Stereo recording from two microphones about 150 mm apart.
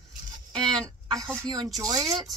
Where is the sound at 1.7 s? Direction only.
25° right (ahead or behind).